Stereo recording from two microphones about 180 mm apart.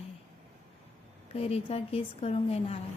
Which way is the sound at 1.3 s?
35° left (ahead or behind).